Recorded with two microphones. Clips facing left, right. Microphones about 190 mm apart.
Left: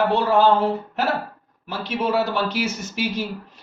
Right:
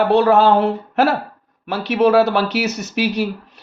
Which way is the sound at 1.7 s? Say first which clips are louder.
Right 9 dB; 70° right (ahead or behind).